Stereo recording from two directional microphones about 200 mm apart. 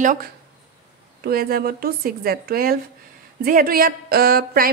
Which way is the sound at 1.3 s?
50° right (ahead or behind).